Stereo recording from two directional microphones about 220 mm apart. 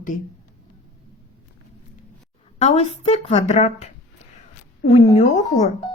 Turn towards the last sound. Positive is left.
turn(degrees=30)  # may be behind; listen again after turning